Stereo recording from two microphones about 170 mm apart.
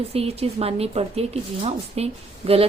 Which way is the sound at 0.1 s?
35° right (ahead or behind).